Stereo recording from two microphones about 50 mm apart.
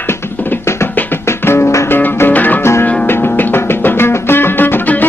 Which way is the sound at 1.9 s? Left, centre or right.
Left.